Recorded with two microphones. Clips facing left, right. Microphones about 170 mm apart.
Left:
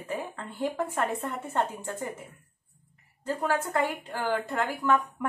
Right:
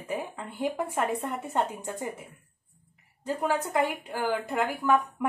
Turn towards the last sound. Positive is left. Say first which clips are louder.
# right 1 dB
turn(degrees=-10)  # may be behind; listen again after turning